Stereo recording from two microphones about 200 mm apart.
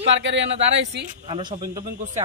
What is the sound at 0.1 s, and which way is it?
Speech, 65° right (ahead or behind).